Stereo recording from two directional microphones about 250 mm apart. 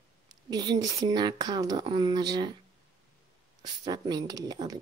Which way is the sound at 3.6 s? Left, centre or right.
Centre.